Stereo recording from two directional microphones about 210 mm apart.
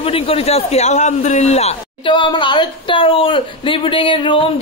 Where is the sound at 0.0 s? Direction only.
25° left (ahead or behind).